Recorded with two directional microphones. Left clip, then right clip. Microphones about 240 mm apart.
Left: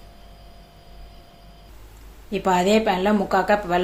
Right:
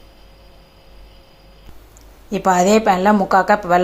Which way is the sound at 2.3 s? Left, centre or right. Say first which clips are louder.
Right 5 dB; centre.